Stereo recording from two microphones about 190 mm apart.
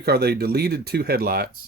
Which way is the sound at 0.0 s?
55° right (ahead or behind).